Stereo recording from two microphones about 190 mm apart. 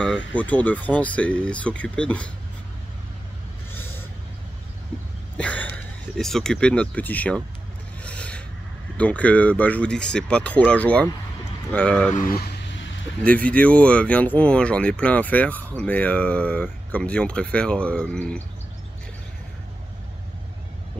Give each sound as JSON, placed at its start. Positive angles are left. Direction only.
{"t": 0.3, "sound": "speech", "side_deg": 5}
{"t": 5.4, "sound": "speech", "side_deg": 5}
{"t": 8.0, "sound": "rub", "side_deg": 5}
{"t": 8.9, "sound": "speech", "side_deg": 5}
{"t": 12.1, "sound": "speech", "side_deg": 50}
{"t": 13.2, "sound": "speech", "side_deg": 5}